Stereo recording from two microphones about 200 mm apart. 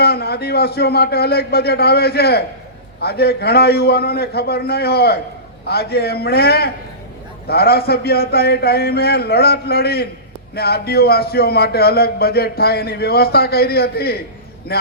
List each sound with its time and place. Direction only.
0.0 s a man's voice: 50° left (ahead or behind)